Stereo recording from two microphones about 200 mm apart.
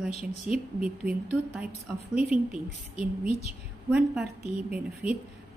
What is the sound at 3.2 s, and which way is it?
Speech, 30° left (ahead or behind).